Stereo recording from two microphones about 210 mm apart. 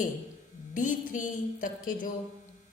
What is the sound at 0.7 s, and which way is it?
A woman's voice, 40° left (ahead or behind).